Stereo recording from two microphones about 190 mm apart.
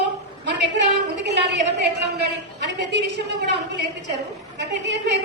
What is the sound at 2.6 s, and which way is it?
Speech, 65° right (ahead or behind).